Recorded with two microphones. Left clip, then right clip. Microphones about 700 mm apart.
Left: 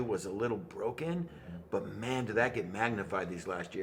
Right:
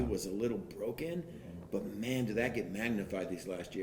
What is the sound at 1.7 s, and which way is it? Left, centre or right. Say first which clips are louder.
A man's voice: left 3 dB; left.